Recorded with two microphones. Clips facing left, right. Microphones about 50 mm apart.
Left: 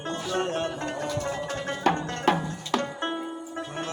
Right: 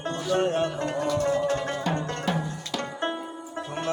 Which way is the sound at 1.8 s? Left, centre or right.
Left.